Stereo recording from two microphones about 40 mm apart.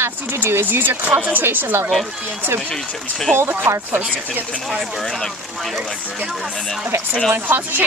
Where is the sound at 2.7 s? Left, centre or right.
Centre.